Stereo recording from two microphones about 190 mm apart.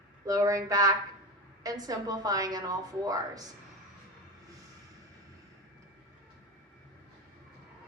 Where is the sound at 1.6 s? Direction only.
20° right (ahead or behind).